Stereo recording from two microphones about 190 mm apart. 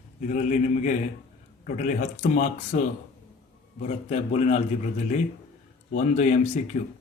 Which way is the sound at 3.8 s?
35° left (ahead or behind).